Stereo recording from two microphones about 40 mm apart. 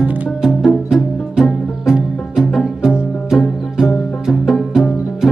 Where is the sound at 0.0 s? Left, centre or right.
Centre.